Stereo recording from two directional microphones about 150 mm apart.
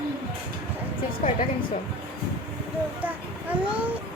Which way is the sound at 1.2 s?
60° left (ahead or behind).